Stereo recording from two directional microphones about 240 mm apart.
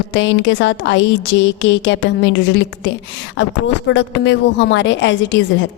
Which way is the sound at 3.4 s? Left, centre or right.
Left.